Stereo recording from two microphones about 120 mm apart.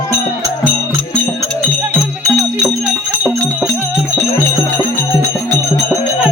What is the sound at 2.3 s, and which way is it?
Music, 5° right (ahead or behind).